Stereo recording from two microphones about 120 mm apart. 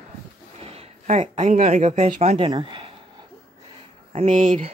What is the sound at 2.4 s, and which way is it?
Speech, 40° right (ahead or behind).